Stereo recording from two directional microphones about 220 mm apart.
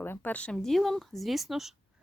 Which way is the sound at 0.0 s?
10° left (ahead or behind).